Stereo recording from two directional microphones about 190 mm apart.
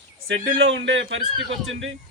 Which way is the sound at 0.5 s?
70° right (ahead or behind).